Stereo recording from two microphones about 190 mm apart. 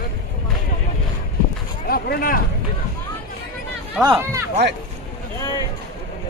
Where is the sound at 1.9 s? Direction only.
50° left (ahead or behind).